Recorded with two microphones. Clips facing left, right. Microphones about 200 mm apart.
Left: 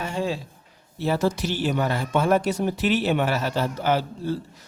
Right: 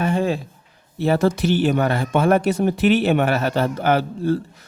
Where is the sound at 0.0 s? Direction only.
55° right (ahead or behind).